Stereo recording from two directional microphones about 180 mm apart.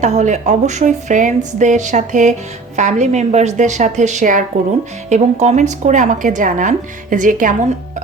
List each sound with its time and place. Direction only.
0.0 s a woman's voice: 40° right (ahead or behind)